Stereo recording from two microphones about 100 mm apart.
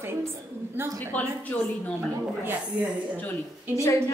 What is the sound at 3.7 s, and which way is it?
Speech, 30° left (ahead or behind).